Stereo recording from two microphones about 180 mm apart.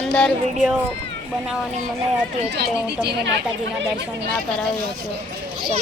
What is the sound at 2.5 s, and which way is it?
Speech, 70° right (ahead or behind).